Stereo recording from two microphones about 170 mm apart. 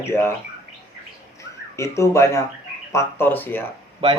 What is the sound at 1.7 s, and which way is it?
Speech, 15° left (ahead or behind).